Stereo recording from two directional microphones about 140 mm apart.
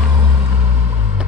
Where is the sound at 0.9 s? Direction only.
10° right (ahead or behind).